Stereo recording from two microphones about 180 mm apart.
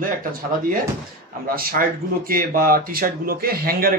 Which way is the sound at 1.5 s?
55° right (ahead or behind).